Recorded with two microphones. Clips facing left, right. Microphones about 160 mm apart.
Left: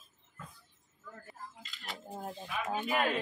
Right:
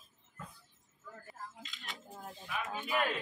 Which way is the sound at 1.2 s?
Centre (ahead or behind).